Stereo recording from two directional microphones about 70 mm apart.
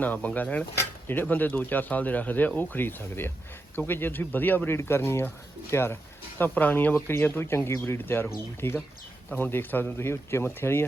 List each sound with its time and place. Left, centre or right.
0.0 s speech: left
0.8 s speech: left
4.8 s speech: left
6.4 s speech: left